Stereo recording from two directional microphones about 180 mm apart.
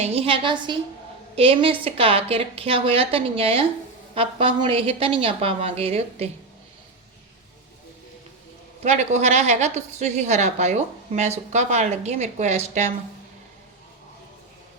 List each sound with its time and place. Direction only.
0.0 s a woman's voice: 35° right (ahead or behind)
8.8 s a woman's voice: 40° right (ahead or behind)